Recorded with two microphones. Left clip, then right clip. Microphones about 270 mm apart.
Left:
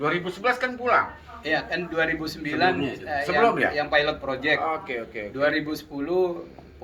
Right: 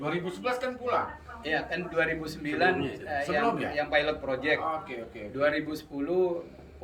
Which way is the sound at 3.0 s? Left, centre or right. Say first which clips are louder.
Left 8 dB; centre.